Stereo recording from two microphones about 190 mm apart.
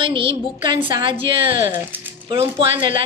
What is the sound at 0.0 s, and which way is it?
Speech, 25° right (ahead or behind).